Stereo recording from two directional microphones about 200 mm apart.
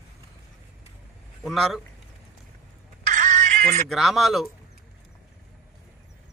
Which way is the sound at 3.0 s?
35° right (ahead or behind).